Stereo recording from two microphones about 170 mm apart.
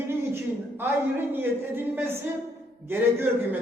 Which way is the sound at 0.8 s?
10° right (ahead or behind).